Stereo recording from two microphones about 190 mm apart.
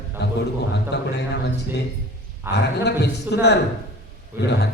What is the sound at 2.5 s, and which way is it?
A man's voice, 60° left (ahead or behind).